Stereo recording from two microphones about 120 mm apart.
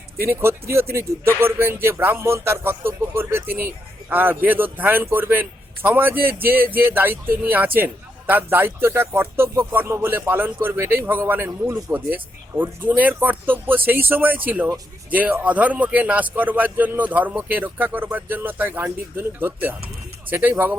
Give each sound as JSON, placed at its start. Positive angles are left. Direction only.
{"t": 0.2, "sound": "speech", "side_deg": -20}